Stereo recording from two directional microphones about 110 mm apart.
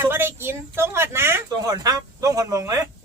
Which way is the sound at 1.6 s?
35° right (ahead or behind).